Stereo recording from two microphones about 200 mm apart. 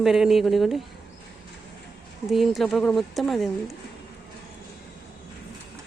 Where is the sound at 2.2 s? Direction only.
Centre (ahead or behind).